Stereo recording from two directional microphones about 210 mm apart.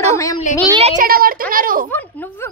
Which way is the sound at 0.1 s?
15° left (ahead or behind).